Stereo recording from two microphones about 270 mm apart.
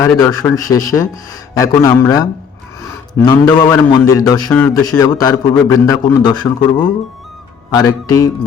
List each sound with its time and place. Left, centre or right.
0.0 s a man's voice: centre